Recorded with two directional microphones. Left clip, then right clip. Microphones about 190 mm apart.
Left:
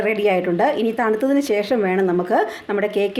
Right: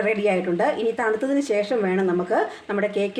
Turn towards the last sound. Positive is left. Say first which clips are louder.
# left 4 dB
turn(degrees=40)  # may be behind; listen again after turning